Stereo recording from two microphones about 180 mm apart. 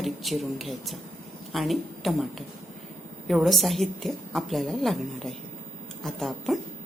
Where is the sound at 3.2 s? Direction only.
Centre (ahead or behind).